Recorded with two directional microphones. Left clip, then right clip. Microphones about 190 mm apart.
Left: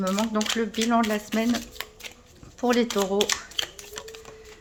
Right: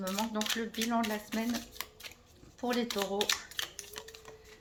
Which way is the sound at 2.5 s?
35° left (ahead or behind).